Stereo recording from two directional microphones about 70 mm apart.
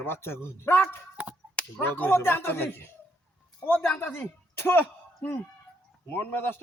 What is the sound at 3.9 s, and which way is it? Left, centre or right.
Speech, left.